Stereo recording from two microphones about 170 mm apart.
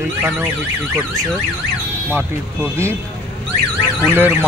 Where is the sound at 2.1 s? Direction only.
15° right (ahead or behind).